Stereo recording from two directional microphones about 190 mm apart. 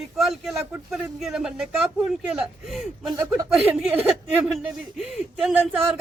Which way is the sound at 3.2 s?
15° right (ahead or behind).